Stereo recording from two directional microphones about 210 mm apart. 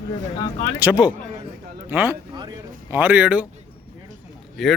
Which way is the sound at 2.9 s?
10° right (ahead or behind).